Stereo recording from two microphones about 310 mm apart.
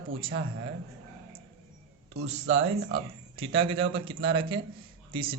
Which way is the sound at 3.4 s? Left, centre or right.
Centre.